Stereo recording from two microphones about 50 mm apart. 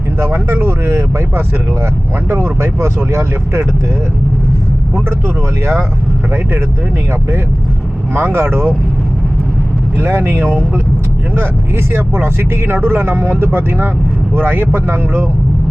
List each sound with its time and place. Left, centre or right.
0.3 s speech: right
2.3 s speech: right
8.1 s speech: right
10.0 s speech: right
11.9 s speech: right